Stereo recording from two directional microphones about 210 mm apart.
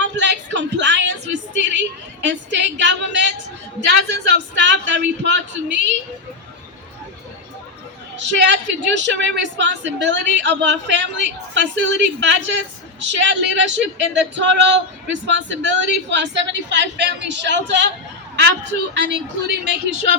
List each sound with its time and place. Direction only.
0.2 s music: 60° right (ahead or behind)
2.2 s a sound: 60° right (ahead or behind)
3.8 s a woman's voice: 55° right (ahead or behind)
8.1 s a woman's voice: 55° right (ahead or behind)